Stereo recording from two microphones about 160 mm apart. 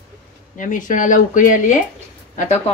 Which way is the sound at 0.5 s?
55° left (ahead or behind).